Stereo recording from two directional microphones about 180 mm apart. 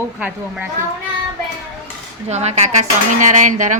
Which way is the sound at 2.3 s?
40° right (ahead or behind).